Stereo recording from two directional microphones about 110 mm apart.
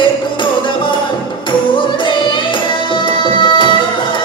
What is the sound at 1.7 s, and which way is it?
Music, 45° left (ahead or behind).